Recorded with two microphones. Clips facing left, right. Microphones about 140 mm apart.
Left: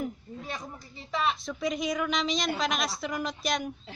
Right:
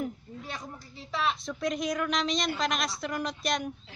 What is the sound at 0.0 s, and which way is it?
Speech, centre (ahead or behind).